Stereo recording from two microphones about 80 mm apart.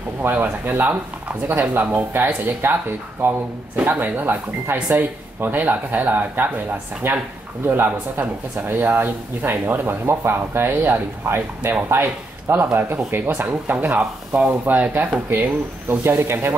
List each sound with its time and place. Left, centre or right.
0.2 s speech: right